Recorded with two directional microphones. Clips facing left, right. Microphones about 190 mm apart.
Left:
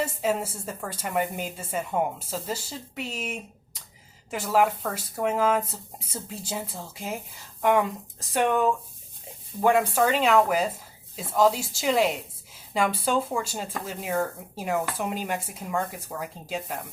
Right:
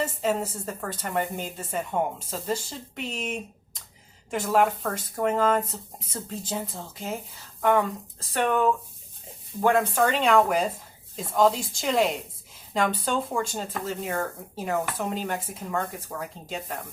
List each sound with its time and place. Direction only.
0.0 s speech: 10° left (ahead or behind)